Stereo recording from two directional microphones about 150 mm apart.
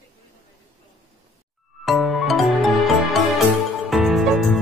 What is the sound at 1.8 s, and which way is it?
Music, centre (ahead or behind).